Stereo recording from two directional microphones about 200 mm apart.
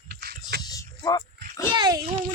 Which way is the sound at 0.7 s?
20° left (ahead or behind).